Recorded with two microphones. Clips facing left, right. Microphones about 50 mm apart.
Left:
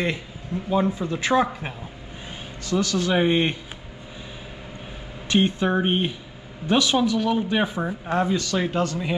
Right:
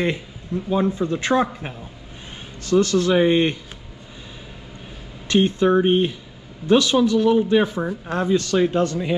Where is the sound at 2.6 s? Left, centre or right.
Right.